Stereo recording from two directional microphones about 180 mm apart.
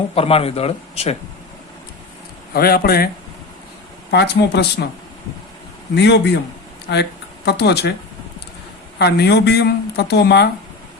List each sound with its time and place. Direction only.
0.1 s speech: 30° left (ahead or behind)
2.5 s speech: 55° left (ahead or behind)
4.1 s speech: 65° left (ahead or behind)
5.9 s a man's voice: 70° left (ahead or behind)
9.0 s speech: 65° left (ahead or behind)